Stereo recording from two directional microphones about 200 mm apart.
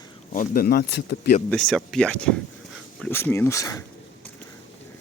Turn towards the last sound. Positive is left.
turn(degrees=15)  # may be behind; listen again after turning